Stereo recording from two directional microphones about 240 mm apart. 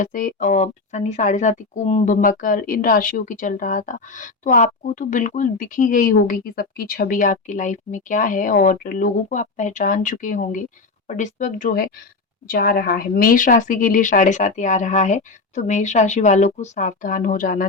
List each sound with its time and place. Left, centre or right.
0.0 s a woman's voice: left